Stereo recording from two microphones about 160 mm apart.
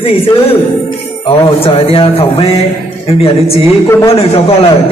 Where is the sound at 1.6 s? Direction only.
35° left (ahead or behind).